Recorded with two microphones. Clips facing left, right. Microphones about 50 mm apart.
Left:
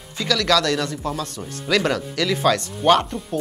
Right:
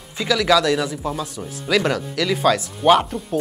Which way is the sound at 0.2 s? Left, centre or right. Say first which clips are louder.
Right 2 dB; centre.